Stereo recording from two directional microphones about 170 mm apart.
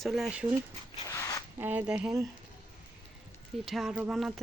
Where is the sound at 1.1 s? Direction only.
15° left (ahead or behind).